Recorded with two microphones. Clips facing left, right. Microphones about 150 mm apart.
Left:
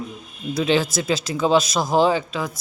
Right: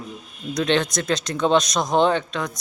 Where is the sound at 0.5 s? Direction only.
5° left (ahead or behind).